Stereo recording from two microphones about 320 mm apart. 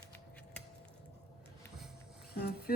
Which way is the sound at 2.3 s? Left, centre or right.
Left.